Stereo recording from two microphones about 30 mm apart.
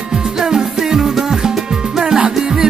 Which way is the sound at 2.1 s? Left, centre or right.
Right.